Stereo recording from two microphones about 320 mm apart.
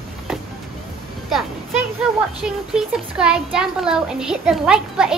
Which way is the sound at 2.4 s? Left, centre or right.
Centre.